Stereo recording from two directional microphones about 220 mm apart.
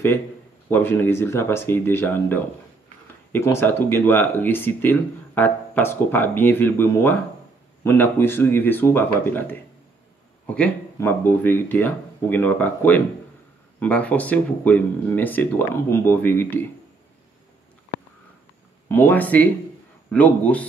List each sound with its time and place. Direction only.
0.7 s speech: 10° left (ahead or behind)
18.9 s speech: 10° left (ahead or behind)